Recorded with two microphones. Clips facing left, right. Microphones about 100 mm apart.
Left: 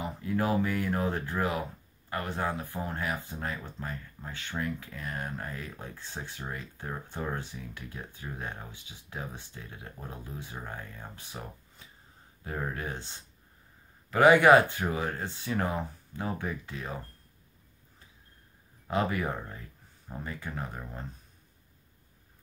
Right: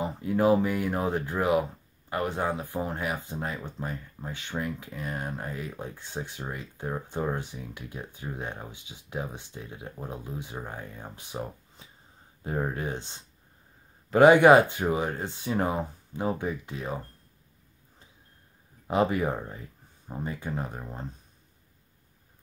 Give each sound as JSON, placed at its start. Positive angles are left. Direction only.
{"t": 0.0, "sound": "speech", "side_deg": -25}
{"t": 18.9, "sound": "speech", "side_deg": -20}